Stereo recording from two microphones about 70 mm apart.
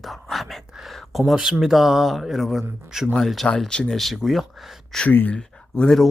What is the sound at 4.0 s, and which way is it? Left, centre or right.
Speech, centre.